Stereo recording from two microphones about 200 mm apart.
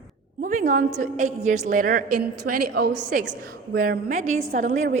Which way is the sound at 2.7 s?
55° right (ahead or behind).